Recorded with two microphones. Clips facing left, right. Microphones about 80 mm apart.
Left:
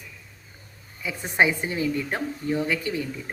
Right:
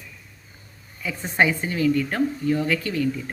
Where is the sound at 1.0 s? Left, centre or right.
Centre.